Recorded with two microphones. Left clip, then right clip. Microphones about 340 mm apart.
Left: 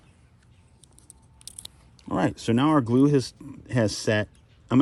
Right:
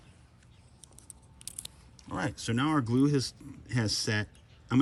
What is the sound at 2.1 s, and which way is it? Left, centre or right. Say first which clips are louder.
Speech: left 9 dB; centre.